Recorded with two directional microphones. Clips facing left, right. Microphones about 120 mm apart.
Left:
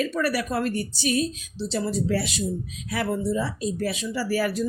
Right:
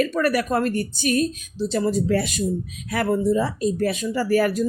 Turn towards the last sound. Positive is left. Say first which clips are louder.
# right 5 dB
turn(degrees=-50)  # may be behind; listen again after turning